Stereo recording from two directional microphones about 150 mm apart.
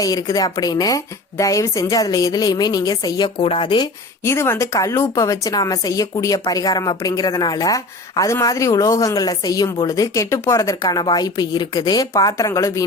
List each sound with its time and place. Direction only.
0.0 s speech: 25° left (ahead or behind)
4.2 s speech: 15° left (ahead or behind)